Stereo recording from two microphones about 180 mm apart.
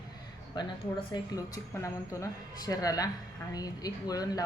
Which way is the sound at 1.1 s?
20° left (ahead or behind).